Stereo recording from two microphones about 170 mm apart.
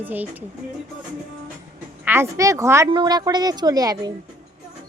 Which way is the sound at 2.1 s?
15° right (ahead or behind).